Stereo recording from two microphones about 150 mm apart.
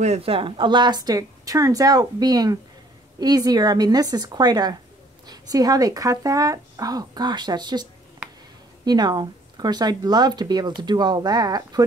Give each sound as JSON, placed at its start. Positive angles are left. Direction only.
{"t": 0.0, "sound": "speech", "side_deg": -45}